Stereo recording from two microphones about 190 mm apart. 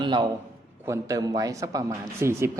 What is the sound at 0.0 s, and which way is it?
A man's voice, 25° right (ahead or behind).